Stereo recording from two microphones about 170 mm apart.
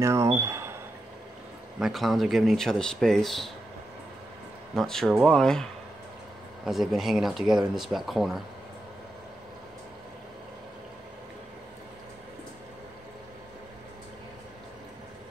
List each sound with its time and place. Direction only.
0.0 s speech: 15° right (ahead or behind)
1.8 s speech: centre (ahead or behind)
4.7 s speech: centre (ahead or behind)